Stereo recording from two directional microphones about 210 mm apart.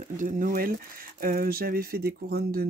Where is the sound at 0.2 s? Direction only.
40° right (ahead or behind).